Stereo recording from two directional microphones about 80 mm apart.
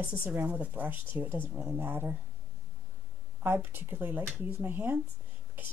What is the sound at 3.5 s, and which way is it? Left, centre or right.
A woman's voice, right.